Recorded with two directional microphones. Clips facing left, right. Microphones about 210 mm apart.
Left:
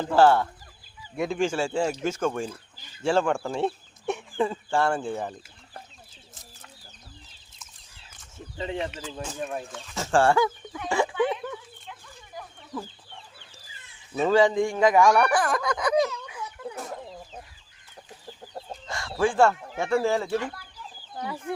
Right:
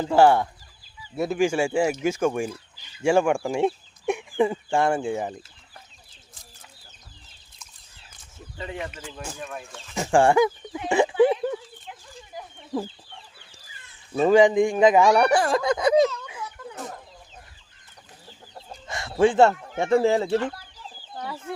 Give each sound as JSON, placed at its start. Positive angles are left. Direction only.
{"t": 0.0, "sound": "speech", "side_deg": -15}
{"t": 8.5, "sound": "speech", "side_deg": 25}
{"t": 9.9, "sound": "speech", "side_deg": -15}
{"t": 11.1, "sound": "chicken", "side_deg": -30}
{"t": 14.2, "sound": "speech", "side_deg": -15}
{"t": 18.9, "sound": "chicken", "side_deg": -20}
{"t": 20.0, "sound": "speech", "side_deg": -20}
{"t": 21.2, "sound": "speech", "side_deg": 15}